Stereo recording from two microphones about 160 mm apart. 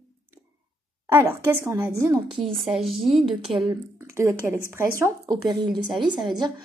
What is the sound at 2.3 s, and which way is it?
Speech, 30° right (ahead or behind).